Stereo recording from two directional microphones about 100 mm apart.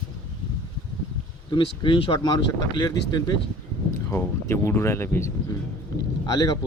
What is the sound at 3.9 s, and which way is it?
Speech, 25° left (ahead or behind).